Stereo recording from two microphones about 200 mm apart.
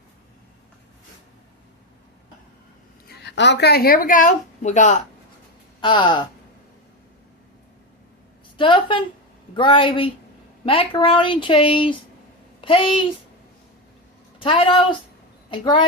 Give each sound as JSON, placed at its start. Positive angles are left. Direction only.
{"t": 3.1, "sound": "a woman's voice", "side_deg": 60}
{"t": 5.8, "sound": "speech", "side_deg": 25}
{"t": 8.5, "sound": "speech", "side_deg": 25}
{"t": 14.3, "sound": "a woman's voice", "side_deg": 25}